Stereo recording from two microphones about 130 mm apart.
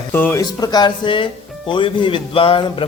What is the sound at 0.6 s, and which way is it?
Speech, 30° left (ahead or behind).